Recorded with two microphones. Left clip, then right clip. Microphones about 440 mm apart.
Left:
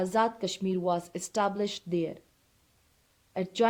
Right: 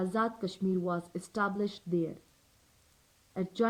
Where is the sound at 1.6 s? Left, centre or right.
Centre.